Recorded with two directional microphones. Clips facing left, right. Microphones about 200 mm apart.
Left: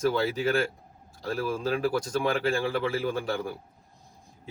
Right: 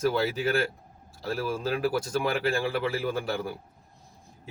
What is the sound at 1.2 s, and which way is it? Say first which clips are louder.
A man's voice: left 1 dB; 5° right (ahead or behind).